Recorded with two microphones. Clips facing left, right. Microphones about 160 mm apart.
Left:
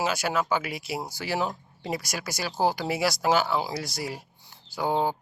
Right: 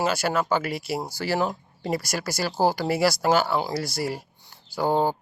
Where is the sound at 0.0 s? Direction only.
Centre (ahead or behind).